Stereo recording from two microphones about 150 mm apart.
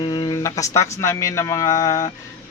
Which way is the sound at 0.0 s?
30° left (ahead or behind).